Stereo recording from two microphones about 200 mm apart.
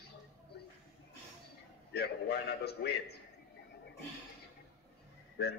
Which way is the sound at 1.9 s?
55° left (ahead or behind).